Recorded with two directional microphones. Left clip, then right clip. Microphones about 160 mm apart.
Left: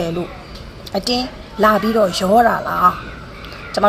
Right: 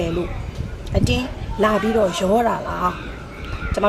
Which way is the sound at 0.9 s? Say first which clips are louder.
Left 3 dB; 20° right (ahead or behind).